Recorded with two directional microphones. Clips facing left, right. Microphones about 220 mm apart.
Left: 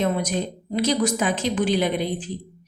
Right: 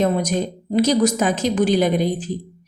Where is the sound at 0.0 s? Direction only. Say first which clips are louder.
Right 4 dB; 40° right (ahead or behind).